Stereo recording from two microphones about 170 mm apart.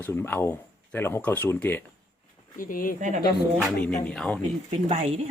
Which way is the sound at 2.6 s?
55° left (ahead or behind).